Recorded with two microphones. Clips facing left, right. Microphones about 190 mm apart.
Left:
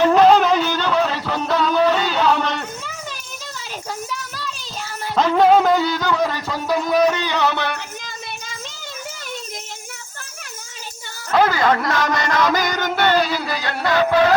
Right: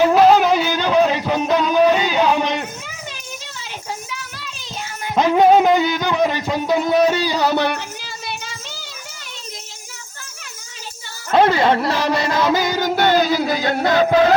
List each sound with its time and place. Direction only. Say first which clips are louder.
0.0 s a sound: right 1 dB; 10° right (ahead or behind)
5.1 s music: right 1 dB; 15° right (ahead or behind); by 7.7 s 35° right (ahead or behind)
11.3 s speech: right 2 dB; 25° right (ahead or behind)
12.3 s music: even; 30° right (ahead or behind)
12.7 s music: right 2 dB; 10° right (ahead or behind)
13.1 s a sound: right 3 dB; 45° right (ahead or behind)
13.6 s speech: even; 45° right (ahead or behind)